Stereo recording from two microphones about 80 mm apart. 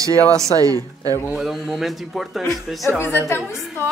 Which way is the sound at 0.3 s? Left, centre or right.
Right.